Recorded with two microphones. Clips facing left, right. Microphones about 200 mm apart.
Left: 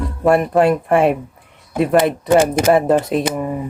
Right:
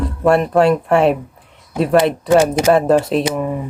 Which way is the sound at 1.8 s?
Centre (ahead or behind).